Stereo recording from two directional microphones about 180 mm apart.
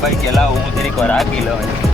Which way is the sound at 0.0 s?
Centre (ahead or behind).